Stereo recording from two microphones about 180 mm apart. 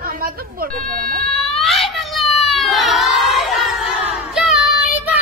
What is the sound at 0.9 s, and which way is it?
Emergency vehicle, 55° right (ahead or behind).